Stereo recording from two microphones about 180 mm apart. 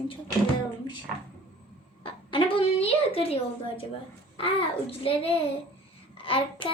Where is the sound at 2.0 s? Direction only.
30° left (ahead or behind).